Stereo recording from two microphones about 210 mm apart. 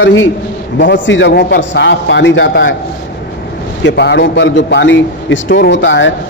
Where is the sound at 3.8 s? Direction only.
55° left (ahead or behind).